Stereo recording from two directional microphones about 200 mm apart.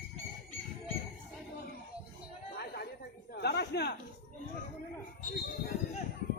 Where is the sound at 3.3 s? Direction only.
55° left (ahead or behind).